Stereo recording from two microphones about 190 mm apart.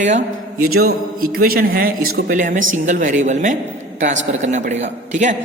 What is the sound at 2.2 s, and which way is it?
A man's voice, 40° right (ahead or behind).